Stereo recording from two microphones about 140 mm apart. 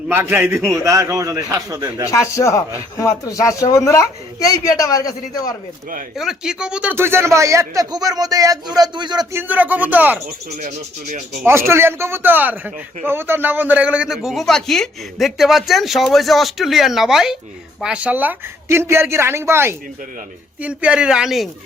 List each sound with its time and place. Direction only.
0.1 s speech: 15° right (ahead or behind)
2.0 s a man's voice: 20° left (ahead or behind)
6.1 s speech: 5° right (ahead or behind)
6.9 s speech: 15° right (ahead or behind)
9.3 s a woman's voice: 15° right (ahead or behind)
10.5 s speech: 55° right (ahead or behind)
11.4 s a woman's voice: 20° right (ahead or behind); by 21.5 s centre (ahead or behind)